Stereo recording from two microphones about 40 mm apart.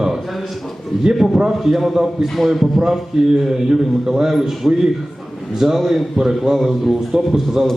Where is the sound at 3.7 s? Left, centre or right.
Centre.